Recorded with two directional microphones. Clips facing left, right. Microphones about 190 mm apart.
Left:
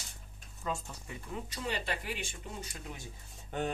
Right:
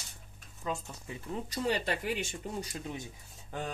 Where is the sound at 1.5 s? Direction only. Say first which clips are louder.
Right 6 dB; 40° right (ahead or behind).